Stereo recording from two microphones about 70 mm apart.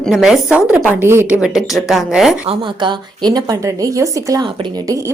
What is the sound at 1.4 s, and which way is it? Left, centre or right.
Speech, centre.